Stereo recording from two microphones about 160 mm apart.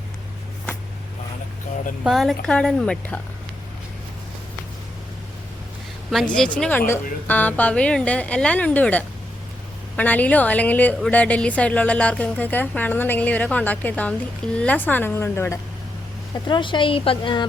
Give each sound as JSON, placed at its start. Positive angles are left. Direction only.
{"t": 2.0, "sound": "a woman's voice", "side_deg": 0}
{"t": 6.1, "sound": "a woman's voice", "side_deg": 5}
{"t": 16.3, "sound": "speech", "side_deg": 30}